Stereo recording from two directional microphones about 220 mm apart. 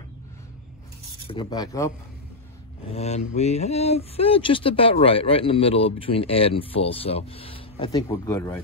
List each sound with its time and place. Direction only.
1.2 s speech: 25° left (ahead or behind)
2.9 s speech: 30° left (ahead or behind); by 8.5 s 10° left (ahead or behind)